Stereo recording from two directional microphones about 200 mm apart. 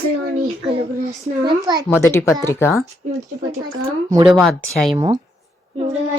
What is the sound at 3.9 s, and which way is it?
Speech, 20° right (ahead or behind).